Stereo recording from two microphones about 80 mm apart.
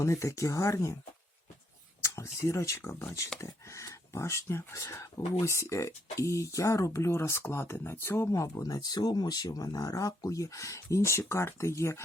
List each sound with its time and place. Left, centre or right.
0.0 s speech: left
2.0 s speech: left
8.3 s speech: left